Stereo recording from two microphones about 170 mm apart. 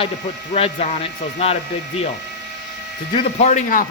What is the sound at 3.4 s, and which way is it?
Speech, 50° left (ahead or behind).